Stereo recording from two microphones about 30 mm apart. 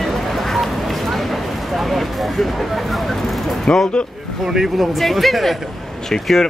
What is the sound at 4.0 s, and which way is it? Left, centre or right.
Speech, left.